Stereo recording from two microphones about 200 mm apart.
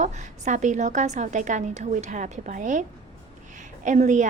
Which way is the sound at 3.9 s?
35° right (ahead or behind).